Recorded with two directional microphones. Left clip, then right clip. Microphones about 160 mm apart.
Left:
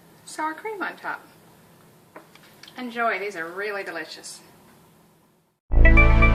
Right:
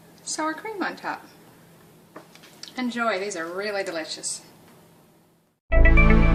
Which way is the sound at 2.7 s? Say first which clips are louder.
Even; 45° right (ahead or behind).